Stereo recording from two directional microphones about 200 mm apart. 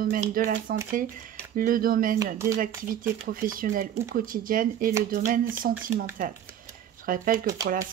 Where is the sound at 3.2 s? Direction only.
45° right (ahead or behind).